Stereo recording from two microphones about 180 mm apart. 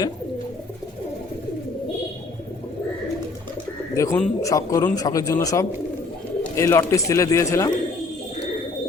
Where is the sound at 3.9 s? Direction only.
15° left (ahead or behind).